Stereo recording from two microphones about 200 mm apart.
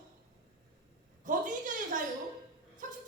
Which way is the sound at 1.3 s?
40° right (ahead or behind).